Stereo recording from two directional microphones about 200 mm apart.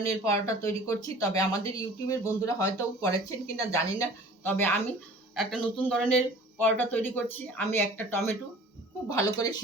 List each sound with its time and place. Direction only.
0.0 s speech: 15° left (ahead or behind)